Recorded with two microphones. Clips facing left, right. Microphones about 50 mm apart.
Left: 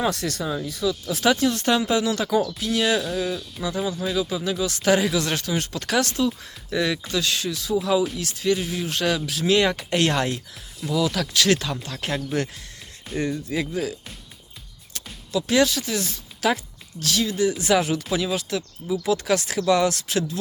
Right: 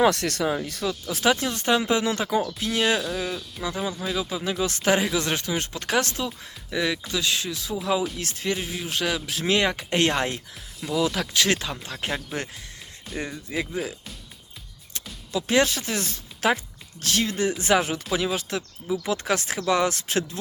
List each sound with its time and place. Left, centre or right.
0.0 s speech: right
1.0 s speech: centre
3.0 s speech: centre
3.6 s speech: centre
6.2 s speech: centre
8.2 s speech: right
8.5 s speech: centre
9.2 s speech: right
15.3 s speech: right
18.1 s speech: centre
18.3 s speech: right